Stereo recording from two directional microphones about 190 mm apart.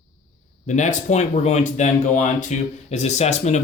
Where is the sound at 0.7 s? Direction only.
40° left (ahead or behind).